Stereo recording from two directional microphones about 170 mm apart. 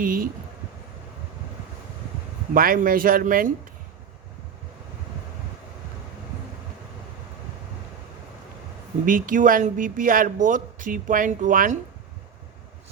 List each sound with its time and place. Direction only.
0.0 s speech: 55° right (ahead or behind)
2.5 s speech: 55° right (ahead or behind)
9.0 s speech: 55° right (ahead or behind)